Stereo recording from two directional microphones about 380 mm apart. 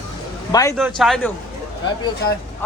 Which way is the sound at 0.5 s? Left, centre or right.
Centre.